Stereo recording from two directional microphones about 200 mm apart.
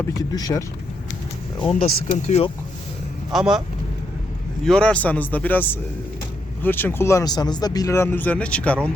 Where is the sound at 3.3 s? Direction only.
Centre (ahead or behind).